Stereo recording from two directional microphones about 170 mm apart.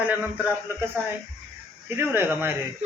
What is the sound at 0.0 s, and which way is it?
Speech, 10° right (ahead or behind).